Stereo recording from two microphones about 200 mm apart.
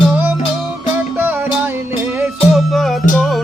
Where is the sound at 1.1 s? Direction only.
10° right (ahead or behind).